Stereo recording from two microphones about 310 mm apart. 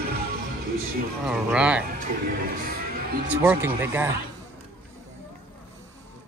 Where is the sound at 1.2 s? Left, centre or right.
Centre.